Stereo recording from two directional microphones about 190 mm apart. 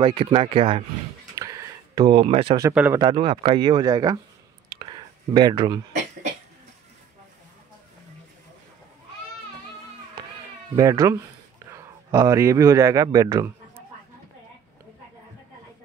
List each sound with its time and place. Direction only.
0.0 s speech: 25° right (ahead or behind)
1.3 s a sound: 15° right (ahead or behind)
2.6 s speech: 10° right (ahead or behind)
3.0 s speech: 20° right (ahead or behind)
4.6 s whispering: 25° right (ahead or behind)
10.8 s a man's voice: 15° right (ahead or behind)